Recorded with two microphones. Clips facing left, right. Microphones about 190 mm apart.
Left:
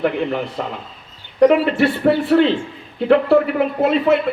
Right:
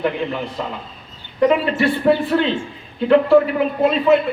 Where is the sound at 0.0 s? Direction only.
60° left (ahead or behind).